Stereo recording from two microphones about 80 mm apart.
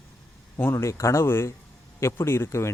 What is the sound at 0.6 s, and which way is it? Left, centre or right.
Speech, left.